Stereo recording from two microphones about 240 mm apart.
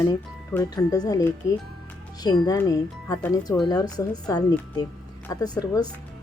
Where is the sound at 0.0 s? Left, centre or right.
Centre.